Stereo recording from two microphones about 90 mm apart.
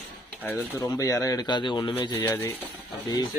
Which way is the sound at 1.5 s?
55° left (ahead or behind).